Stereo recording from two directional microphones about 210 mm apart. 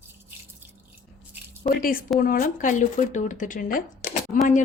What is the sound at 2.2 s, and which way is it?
A woman's voice, 45° left (ahead or behind).